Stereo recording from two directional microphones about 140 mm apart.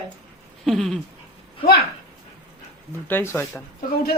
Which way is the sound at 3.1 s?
15° left (ahead or behind).